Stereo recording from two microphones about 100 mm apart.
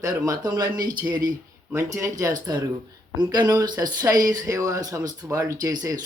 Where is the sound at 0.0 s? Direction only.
35° right (ahead or behind).